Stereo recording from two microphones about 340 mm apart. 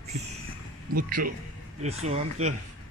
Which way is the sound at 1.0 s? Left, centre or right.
Right.